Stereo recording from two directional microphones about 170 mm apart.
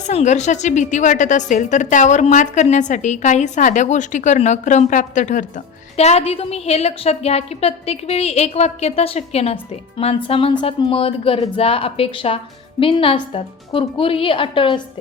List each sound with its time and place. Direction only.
0.1 s a woman's voice: 40° left (ahead or behind)